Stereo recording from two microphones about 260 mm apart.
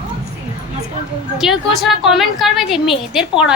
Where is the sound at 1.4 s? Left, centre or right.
Centre.